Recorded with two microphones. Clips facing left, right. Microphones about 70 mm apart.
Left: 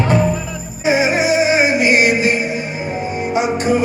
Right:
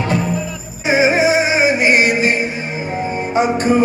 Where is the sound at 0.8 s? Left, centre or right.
Right.